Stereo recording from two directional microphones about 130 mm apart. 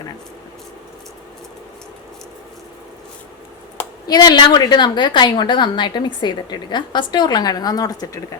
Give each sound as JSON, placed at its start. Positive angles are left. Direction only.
{"t": 4.0, "sound": "a woman's voice", "side_deg": 30}